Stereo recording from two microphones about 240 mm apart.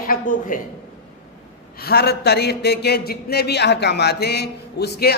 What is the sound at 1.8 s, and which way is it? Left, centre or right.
Speech, left.